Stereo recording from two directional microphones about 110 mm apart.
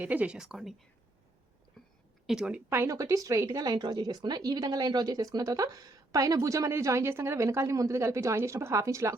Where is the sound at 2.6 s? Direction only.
25° right (ahead or behind).